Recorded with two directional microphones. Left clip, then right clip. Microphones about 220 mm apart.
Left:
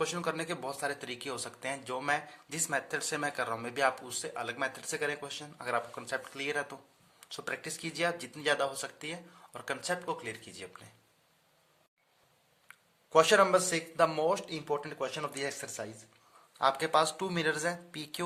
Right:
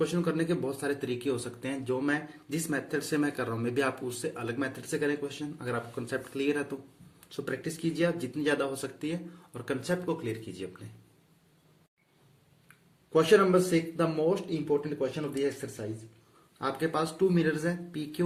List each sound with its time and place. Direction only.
0.0 s speech: 40° left (ahead or behind)
13.1 s speech: 45° left (ahead or behind)